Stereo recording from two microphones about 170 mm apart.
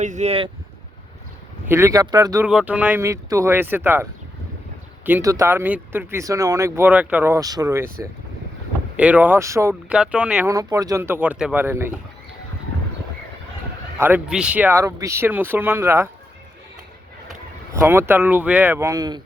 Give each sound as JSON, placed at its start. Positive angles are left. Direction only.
{"t": 0.0, "sound": "speech", "side_deg": -45}
{"t": 1.6, "sound": "speech", "side_deg": -15}
{"t": 2.5, "sound": "speech", "side_deg": -5}
{"t": 5.0, "sound": "speech", "side_deg": -15}
{"t": 9.0, "sound": "speech", "side_deg": -10}
{"t": 9.9, "sound": "speech", "side_deg": -5}
{"t": 10.5, "sound": "speech", "side_deg": -20}
{"t": 14.0, "sound": "speech", "side_deg": -10}
{"t": 17.7, "sound": "speech", "side_deg": -15}